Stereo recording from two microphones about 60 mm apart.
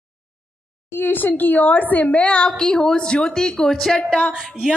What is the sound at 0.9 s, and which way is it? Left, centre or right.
A woman's voice, left.